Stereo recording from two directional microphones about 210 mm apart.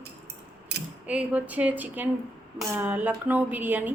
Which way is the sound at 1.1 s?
5° right (ahead or behind).